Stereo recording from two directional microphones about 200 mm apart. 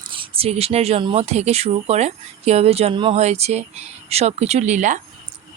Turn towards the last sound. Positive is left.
turn(degrees=-40)  # may be behind; listen again after turning